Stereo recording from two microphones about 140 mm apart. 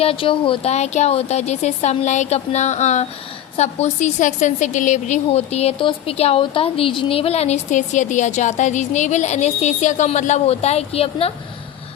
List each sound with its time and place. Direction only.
0.0 s a woman's voice: 40° left (ahead or behind)